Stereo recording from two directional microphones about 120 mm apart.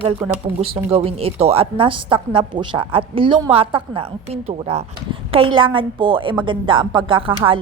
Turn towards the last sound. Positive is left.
turn(degrees=-45)  # may be behind; listen again after turning